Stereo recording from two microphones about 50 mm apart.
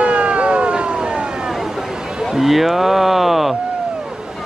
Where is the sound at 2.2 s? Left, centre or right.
Centre.